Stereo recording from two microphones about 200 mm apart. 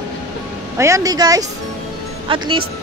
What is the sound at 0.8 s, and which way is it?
Speech, 15° right (ahead or behind).